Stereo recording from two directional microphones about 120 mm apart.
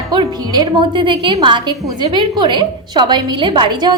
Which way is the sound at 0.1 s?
35° right (ahead or behind).